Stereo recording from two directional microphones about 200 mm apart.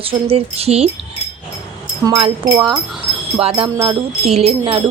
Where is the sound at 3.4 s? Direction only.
25° right (ahead or behind).